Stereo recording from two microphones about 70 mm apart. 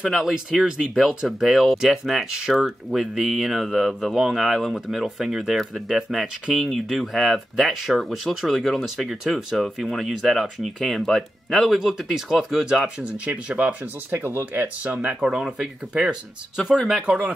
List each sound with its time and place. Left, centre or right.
0.1 s speech: centre
14.1 s speech: right
15.1 s speech: centre
17.0 s speech: centre